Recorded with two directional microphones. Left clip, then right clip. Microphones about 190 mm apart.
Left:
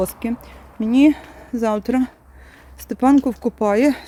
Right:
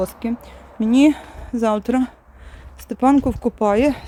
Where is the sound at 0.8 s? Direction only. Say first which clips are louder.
Even; 5° right (ahead or behind).